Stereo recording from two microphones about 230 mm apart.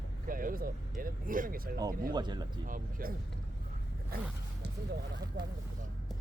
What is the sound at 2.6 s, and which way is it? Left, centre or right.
Speech, right.